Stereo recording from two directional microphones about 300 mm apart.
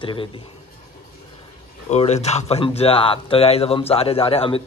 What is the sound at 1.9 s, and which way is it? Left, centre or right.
Speech, left.